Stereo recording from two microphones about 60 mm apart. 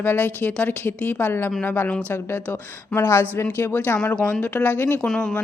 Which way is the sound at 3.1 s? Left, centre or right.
Left.